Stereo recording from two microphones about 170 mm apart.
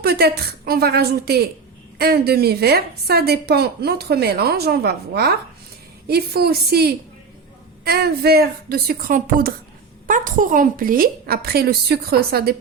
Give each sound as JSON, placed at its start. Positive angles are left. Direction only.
{"t": 0.0, "sound": "a woman's voice", "side_deg": -70}